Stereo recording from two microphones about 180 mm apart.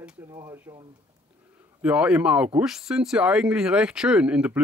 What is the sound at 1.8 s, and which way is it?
Speech, 5° right (ahead or behind).